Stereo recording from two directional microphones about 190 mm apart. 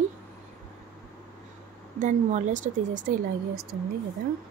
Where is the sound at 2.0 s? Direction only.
40° right (ahead or behind).